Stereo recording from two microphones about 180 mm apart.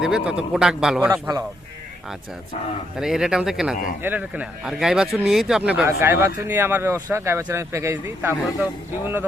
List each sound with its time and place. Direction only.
0.0 s a man's voice: 5° right (ahead or behind)
1.1 s speech: 20° right (ahead or behind)
3.0 s a man's voice: centre (ahead or behind)